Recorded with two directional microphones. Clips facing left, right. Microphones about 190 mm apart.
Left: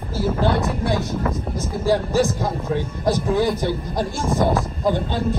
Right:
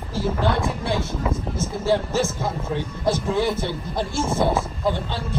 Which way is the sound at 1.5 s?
15° left (ahead or behind).